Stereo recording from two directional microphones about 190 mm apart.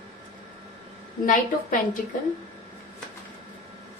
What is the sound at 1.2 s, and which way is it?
Speech, 45° left (ahead or behind).